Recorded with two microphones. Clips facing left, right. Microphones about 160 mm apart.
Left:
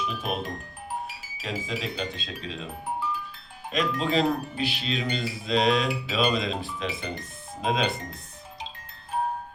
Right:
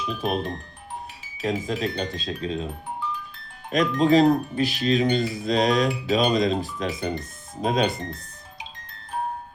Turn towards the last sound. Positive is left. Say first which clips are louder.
# right 3 dB
turn(degrees=-40)  # may be behind; listen again after turning